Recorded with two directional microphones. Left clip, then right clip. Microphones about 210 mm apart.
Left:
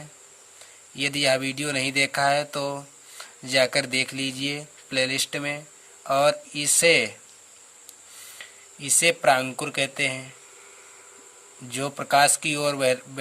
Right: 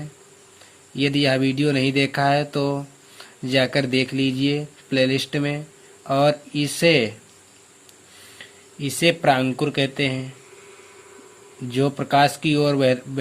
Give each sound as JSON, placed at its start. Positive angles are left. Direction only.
{"t": 0.9, "sound": "speech", "side_deg": 35}
{"t": 8.4, "sound": "speech", "side_deg": 35}
{"t": 11.7, "sound": "speech", "side_deg": 40}